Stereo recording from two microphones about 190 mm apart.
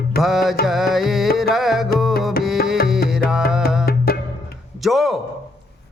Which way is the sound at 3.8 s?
55° left (ahead or behind).